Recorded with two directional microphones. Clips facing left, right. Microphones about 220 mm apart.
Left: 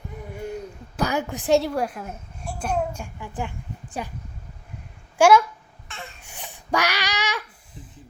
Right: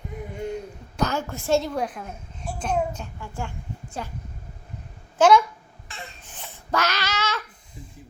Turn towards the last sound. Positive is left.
turn(degrees=5)  # may be behind; listen again after turning